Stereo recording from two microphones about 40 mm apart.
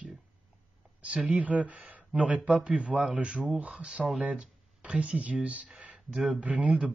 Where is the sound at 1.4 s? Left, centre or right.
Right.